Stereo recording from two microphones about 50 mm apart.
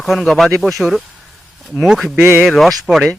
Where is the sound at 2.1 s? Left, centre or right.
Right.